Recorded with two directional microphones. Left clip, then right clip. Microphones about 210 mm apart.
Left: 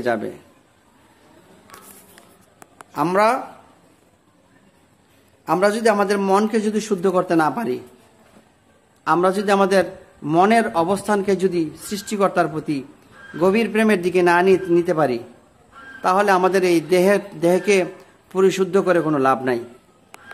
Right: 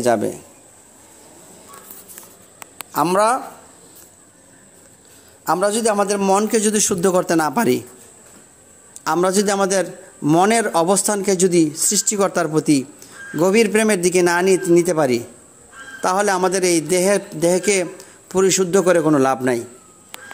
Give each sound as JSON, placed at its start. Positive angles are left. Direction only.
{"t": 0.0, "sound": "a man's voice", "side_deg": -30}
{"t": 2.9, "sound": "a man's voice", "side_deg": -20}
{"t": 5.4, "sound": "a man's voice", "side_deg": -15}
{"t": 6.5, "sound": "a man's voice", "side_deg": -40}
{"t": 9.0, "sound": "a man's voice", "side_deg": -35}